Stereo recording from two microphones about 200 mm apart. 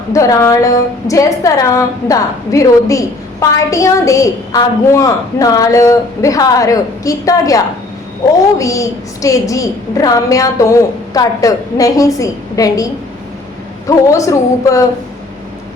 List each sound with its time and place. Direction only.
0.1 s a woman's voice: 15° left (ahead or behind)